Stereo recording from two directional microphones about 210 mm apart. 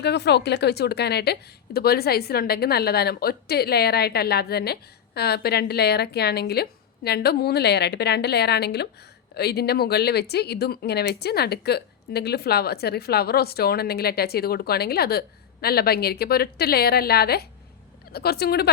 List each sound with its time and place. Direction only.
0.0 s a woman's voice: 55° left (ahead or behind)